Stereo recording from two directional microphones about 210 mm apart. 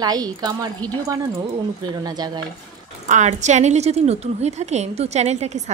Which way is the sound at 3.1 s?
35° right (ahead or behind).